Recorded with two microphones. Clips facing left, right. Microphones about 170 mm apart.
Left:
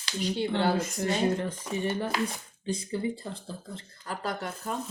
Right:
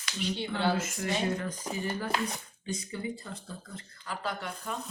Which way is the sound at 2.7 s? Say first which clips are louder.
Left 5 dB; 30° left (ahead or behind).